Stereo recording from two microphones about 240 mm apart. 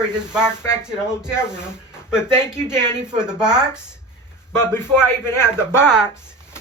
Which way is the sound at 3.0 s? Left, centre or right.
Centre.